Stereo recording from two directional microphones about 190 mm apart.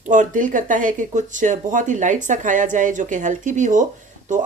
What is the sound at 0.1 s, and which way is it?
Speech, 45° right (ahead or behind).